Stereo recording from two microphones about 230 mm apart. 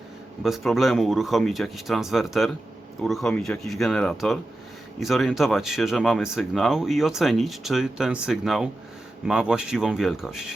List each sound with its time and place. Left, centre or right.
0.4 s speech: centre